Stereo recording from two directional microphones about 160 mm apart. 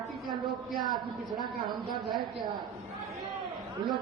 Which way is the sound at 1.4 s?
25° right (ahead or behind).